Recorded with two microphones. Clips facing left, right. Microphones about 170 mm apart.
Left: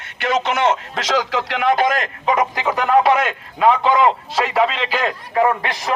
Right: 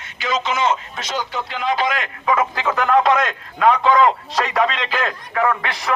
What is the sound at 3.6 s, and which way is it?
Speech, 25° left (ahead or behind).